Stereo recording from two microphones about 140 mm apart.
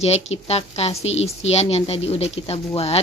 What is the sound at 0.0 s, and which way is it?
A woman's voice, 50° left (ahead or behind).